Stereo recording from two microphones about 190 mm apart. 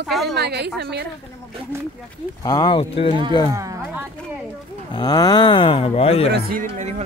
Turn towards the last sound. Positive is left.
turn(degrees=30)  # may be behind; listen again after turning